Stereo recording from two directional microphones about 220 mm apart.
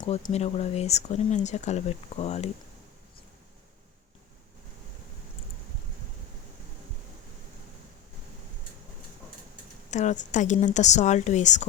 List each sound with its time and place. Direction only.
0.0 s speech: 30° left (ahead or behind)
9.9 s a woman's voice: 35° left (ahead or behind)